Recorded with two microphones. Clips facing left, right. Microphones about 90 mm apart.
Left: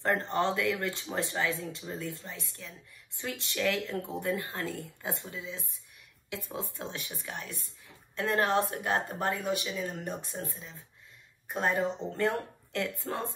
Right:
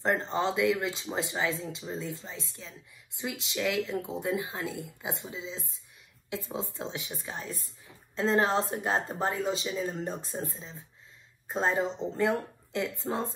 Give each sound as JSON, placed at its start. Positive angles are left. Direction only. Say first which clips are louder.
{"t": 0.0, "sound": "speech", "louder": "even", "side_deg": -20}